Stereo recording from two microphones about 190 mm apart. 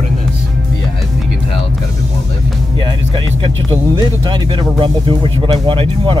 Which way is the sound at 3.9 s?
20° right (ahead or behind).